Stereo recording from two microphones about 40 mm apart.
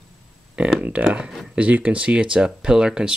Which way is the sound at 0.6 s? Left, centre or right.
Right.